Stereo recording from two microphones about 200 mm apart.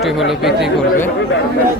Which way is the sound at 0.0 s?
Centre (ahead or behind).